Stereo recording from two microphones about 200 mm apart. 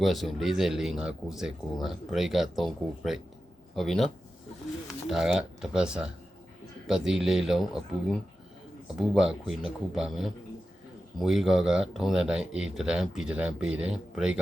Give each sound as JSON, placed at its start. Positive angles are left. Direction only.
{"t": 0.0, "sound": "speech", "side_deg": 0}